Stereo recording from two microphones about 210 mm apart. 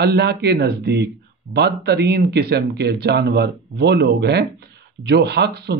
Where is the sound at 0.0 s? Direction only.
50° right (ahead or behind).